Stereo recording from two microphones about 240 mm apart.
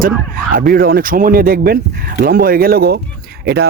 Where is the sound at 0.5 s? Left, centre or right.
Right.